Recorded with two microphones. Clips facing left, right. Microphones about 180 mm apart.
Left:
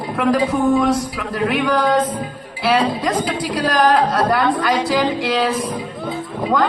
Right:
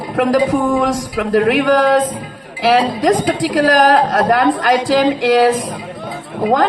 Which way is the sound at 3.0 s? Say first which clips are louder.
Right 6 dB; 45° right (ahead or behind).